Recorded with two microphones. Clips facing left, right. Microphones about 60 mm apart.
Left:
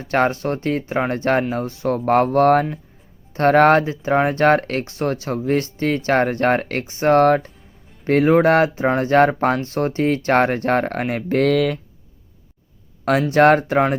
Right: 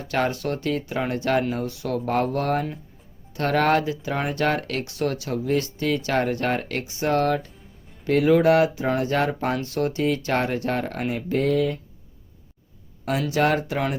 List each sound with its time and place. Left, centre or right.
0.0 s speech: left
11.4 s speech: left
13.3 s speech: left